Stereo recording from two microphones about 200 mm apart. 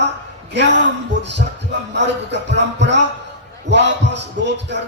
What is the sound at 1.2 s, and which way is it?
Music, 60° right (ahead or behind).